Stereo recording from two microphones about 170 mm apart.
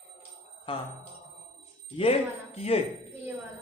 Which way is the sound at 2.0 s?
35° left (ahead or behind).